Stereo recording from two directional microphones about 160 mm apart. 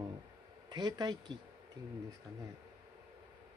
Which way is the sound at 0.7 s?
25° right (ahead or behind).